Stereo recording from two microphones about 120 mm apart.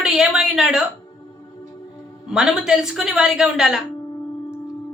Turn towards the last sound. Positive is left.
turn(degrees=-5)  # may be behind; listen again after turning